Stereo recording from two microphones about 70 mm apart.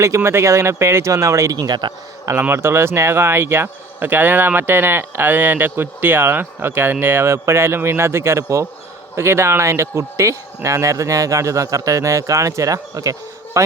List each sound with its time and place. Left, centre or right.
0.2 s speech: right
1.5 s speech: right
2.3 s speech: right